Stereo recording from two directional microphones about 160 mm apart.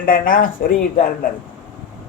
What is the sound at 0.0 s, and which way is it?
A man's voice, 60° left (ahead or behind).